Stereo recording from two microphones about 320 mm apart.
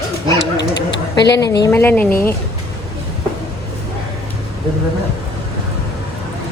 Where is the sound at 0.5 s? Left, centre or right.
Left.